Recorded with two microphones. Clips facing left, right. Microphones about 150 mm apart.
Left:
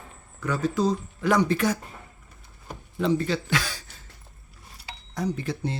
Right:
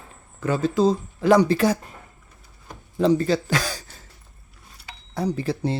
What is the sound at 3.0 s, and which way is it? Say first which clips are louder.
Speech: right 5 dB; 35° right (ahead or behind).